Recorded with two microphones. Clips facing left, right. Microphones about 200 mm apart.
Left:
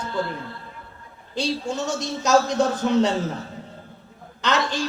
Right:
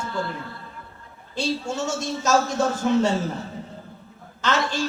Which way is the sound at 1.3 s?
15° left (ahead or behind).